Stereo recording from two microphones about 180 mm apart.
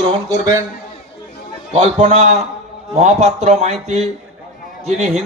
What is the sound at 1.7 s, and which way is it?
A man's voice, 35° right (ahead or behind).